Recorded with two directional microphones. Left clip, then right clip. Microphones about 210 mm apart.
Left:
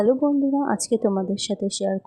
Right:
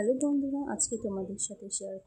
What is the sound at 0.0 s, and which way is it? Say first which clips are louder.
Speech: left 9 dB; 25° left (ahead or behind).